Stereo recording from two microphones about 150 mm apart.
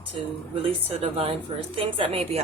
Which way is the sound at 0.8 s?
40° right (ahead or behind).